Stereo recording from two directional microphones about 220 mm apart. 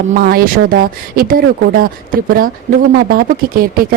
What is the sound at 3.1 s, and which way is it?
Speech, 40° right (ahead or behind).